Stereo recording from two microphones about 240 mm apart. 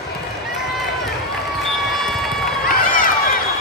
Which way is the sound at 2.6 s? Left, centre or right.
Left.